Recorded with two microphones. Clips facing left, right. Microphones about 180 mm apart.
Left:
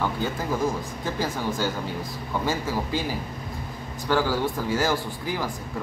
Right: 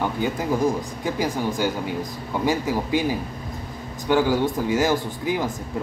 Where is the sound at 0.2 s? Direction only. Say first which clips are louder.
Right 4 dB; 15° right (ahead or behind).